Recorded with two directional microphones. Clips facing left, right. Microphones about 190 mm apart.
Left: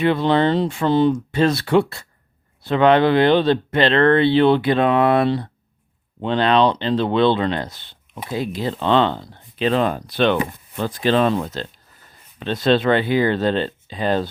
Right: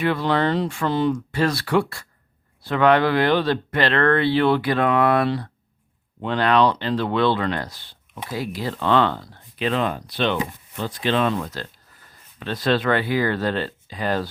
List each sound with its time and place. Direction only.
0.0 s speech: 25° left (ahead or behind); by 11.1 s 55° left (ahead or behind)
11.1 s speech: 35° left (ahead or behind)